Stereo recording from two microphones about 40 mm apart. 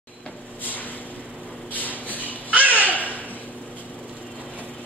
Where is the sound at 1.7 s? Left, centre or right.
Left.